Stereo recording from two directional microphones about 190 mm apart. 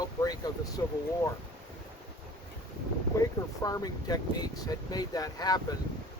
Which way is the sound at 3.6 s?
20° left (ahead or behind).